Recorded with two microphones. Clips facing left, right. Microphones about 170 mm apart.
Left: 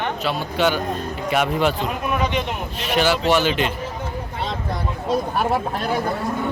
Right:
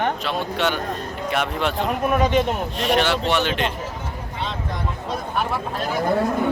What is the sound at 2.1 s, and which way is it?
Speech, 45° right (ahead or behind).